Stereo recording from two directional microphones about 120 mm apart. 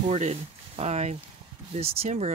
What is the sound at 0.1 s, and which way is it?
Speech, 60° right (ahead or behind).